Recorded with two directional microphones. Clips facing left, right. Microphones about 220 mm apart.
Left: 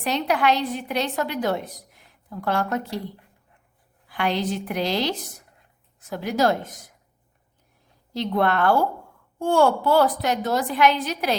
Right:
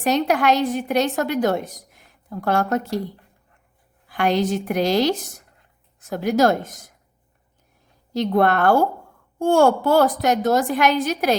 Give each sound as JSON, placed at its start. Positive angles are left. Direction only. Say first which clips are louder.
{"t": 0.0, "sound": "a woman's voice", "louder": "right 4 dB", "side_deg": -45}
{"t": 4.1, "sound": "a woman's voice", "louder": "right 5 dB", "side_deg": -45}
{"t": 8.1, "sound": "a woman's voice", "louder": "right 4 dB", "side_deg": -45}